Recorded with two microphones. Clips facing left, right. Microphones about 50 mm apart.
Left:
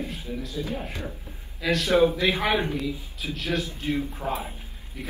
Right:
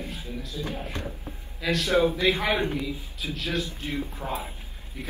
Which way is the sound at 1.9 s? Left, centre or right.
Left.